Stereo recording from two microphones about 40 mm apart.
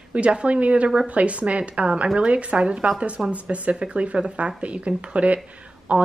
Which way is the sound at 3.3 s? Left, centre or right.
Right.